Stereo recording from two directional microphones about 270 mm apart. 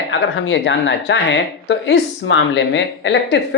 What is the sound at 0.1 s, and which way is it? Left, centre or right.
Speech, left.